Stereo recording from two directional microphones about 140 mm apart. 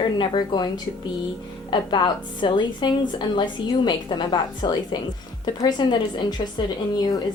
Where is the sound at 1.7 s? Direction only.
35° left (ahead or behind).